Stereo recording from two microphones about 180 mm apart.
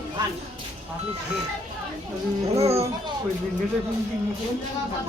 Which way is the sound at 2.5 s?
35° right (ahead or behind).